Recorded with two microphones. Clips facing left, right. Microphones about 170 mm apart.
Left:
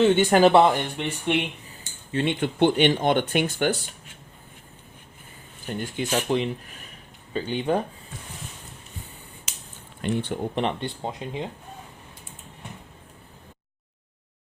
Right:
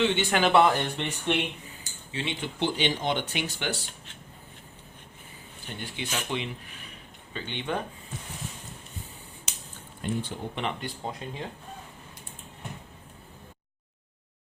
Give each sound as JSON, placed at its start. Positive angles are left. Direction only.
{"t": 0.0, "sound": "speech", "side_deg": 40}
{"t": 0.8, "sound": "speech", "side_deg": 10}
{"t": 2.1, "sound": "speech", "side_deg": 50}
{"t": 5.6, "sound": "speech", "side_deg": 45}
{"t": 10.0, "sound": "speech", "side_deg": 70}
{"t": 10.5, "sound": "speech", "side_deg": 35}